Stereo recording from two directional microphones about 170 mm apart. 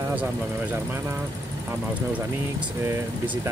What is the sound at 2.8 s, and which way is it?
Speech, 15° right (ahead or behind).